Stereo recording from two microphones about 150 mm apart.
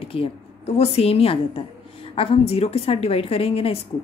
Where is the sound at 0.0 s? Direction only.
40° left (ahead or behind).